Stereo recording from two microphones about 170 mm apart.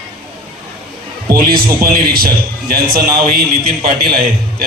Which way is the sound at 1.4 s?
60° right (ahead or behind).